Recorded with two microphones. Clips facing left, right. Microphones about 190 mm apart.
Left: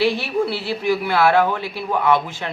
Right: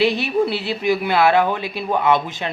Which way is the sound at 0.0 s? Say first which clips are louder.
Right 2 dB; 20° right (ahead or behind).